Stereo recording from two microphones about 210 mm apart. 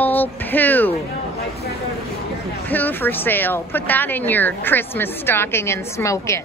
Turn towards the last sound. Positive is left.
turn(degrees=15)  # may be behind; listen again after turning